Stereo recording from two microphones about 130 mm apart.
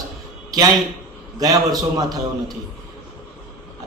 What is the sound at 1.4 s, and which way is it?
Speech, 30° right (ahead or behind).